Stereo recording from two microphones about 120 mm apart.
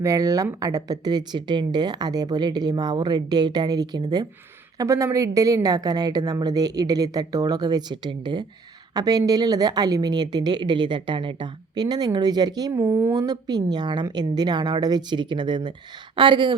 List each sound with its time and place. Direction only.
0.0 s a woman's voice: 25° right (ahead or behind)
12.8 s speech: 20° right (ahead or behind)
13.2 s a woman's voice: 35° right (ahead or behind)